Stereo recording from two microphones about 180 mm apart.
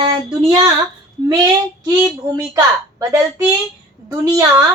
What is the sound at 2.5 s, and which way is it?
Speech, 15° right (ahead or behind).